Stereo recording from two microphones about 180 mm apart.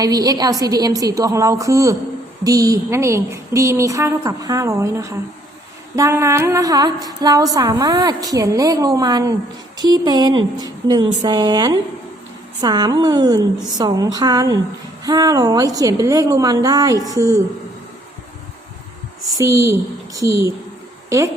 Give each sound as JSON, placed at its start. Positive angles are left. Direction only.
{"t": 0.0, "sound": "a woman's voice", "side_deg": -20}
{"t": 19.4, "sound": "a woman's voice", "side_deg": -15}